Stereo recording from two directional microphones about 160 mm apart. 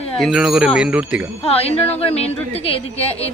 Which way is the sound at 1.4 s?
40° left (ahead or behind).